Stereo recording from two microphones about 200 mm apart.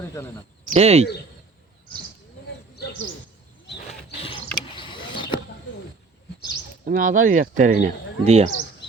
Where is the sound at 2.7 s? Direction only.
55° left (ahead or behind).